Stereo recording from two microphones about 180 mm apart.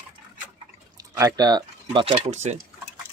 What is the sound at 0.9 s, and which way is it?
Speech, 20° right (ahead or behind).